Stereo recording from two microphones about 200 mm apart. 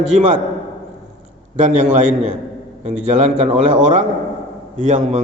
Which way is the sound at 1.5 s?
35° right (ahead or behind).